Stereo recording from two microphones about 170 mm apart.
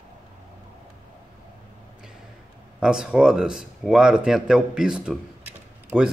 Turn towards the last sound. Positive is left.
turn(degrees=-5)  # may be behind; listen again after turning